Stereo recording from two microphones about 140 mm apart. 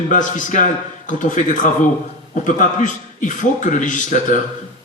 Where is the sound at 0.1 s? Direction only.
65° left (ahead or behind).